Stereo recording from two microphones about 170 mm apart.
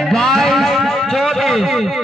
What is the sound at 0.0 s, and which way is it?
Music, centre (ahead or behind).